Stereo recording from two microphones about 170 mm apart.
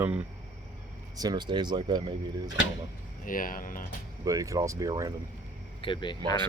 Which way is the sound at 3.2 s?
55° left (ahead or behind).